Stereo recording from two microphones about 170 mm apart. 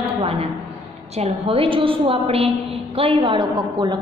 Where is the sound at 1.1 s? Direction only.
35° right (ahead or behind).